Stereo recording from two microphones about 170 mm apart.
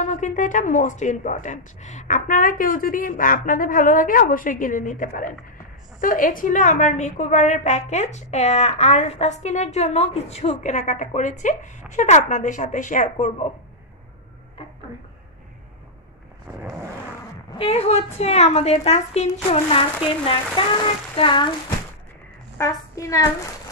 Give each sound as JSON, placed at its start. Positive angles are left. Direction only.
{"t": 0.0, "sound": "a woman's voice", "side_deg": 45}
{"t": 17.6, "sound": "a woman's voice", "side_deg": 35}
{"t": 22.6, "sound": "a woman's voice", "side_deg": 20}